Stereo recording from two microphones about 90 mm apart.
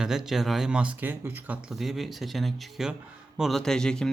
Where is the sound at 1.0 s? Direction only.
25° right (ahead or behind).